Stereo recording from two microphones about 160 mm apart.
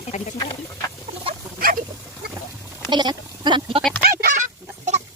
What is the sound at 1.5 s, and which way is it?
Pig, 65° right (ahead or behind).